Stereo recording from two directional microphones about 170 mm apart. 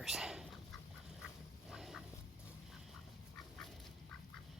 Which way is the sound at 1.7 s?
Centre (ahead or behind).